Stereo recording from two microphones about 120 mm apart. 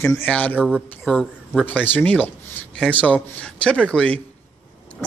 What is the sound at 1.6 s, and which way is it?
A man's voice, 15° left (ahead or behind).